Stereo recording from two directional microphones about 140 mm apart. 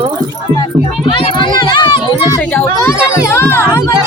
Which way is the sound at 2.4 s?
15° left (ahead or behind).